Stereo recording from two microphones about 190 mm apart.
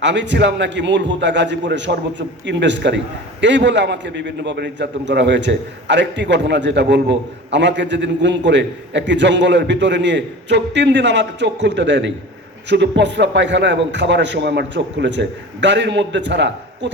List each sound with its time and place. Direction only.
0.0 s a man's voice: 70° right (ahead or behind)